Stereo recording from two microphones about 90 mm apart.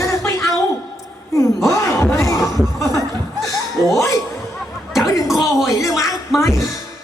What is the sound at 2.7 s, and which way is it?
Chuckle, 35° left (ahead or behind).